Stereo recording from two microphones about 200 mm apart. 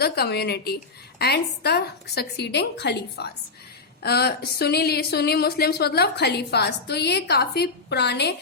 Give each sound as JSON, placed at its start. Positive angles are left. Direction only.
{"t": 0.0, "sound": "a woman's voice", "side_deg": 55}